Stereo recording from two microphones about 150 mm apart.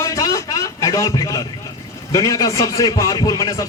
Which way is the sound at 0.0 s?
20° left (ahead or behind).